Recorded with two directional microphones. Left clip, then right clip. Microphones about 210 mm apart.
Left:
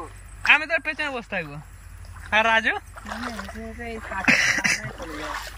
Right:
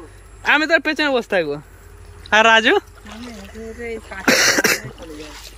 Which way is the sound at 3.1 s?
10° left (ahead or behind).